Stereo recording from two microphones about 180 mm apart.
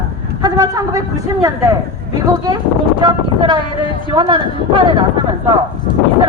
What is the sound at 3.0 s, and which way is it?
A man's voice, 25° right (ahead or behind).